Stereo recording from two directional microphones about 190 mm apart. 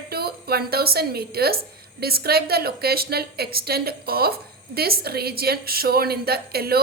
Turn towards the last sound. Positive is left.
turn(degrees=-55)  # may be behind; listen again after turning